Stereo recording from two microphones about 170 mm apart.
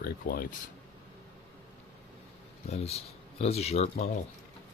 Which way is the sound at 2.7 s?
35° left (ahead or behind).